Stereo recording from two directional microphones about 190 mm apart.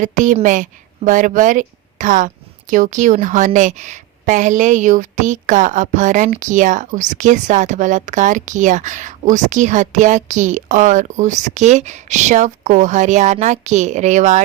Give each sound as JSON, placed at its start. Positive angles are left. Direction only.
{"t": 0.0, "sound": "a woman's voice", "side_deg": -40}